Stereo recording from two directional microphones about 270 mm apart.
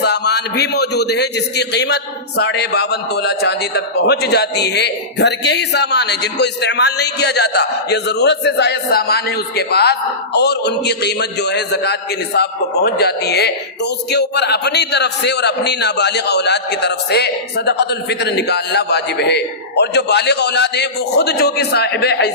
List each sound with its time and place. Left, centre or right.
0.0 s a man's voice: left